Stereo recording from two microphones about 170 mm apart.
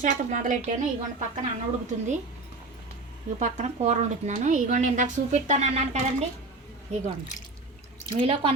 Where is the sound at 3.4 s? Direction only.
45° right (ahead or behind).